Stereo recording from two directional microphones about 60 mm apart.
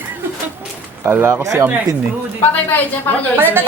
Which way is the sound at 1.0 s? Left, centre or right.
Right.